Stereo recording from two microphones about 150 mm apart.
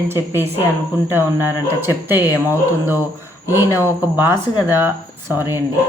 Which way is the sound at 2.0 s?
10° right (ahead or behind).